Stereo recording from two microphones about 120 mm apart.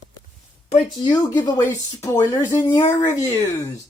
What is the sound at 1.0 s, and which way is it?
Speech, 35° left (ahead or behind).